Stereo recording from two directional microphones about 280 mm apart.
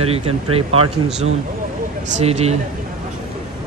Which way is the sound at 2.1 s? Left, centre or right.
Right.